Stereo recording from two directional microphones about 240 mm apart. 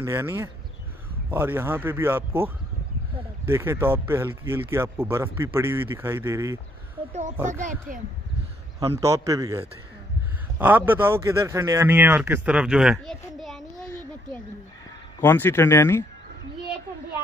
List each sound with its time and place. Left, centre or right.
0.0 s speech: centre
7.1 s speech: right
7.3 s speech: centre
9.0 s speech: centre
15.1 s speech: centre